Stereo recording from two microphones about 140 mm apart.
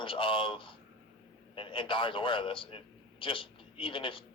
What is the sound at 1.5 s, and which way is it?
A man's voice, 35° left (ahead or behind).